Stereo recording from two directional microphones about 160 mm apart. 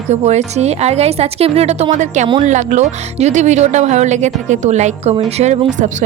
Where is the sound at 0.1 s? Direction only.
45° right (ahead or behind).